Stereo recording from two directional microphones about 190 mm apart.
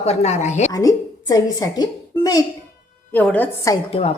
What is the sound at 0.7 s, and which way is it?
A woman's voice, 20° left (ahead or behind).